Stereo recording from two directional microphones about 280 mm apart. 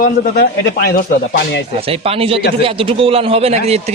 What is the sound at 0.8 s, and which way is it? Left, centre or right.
Speech, left.